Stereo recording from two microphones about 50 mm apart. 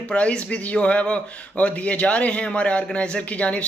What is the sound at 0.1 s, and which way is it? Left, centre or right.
Speech, left.